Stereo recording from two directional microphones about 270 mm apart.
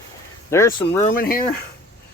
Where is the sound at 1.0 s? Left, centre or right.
Left.